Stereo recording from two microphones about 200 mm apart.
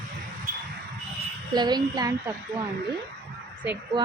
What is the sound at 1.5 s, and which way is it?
Speech, 20° right (ahead or behind).